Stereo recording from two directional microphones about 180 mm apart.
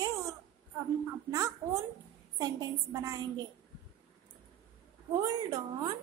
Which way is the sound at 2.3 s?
20° right (ahead or behind).